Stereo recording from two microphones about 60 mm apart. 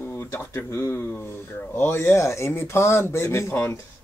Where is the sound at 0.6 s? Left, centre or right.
Left.